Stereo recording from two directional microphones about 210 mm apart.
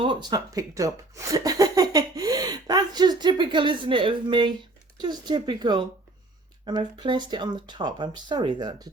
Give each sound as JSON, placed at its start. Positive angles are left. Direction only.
{"t": 0.0, "sound": "speech", "side_deg": -20}